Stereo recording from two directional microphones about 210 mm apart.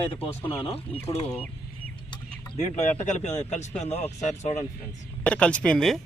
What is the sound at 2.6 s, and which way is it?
Speech, 30° left (ahead or behind).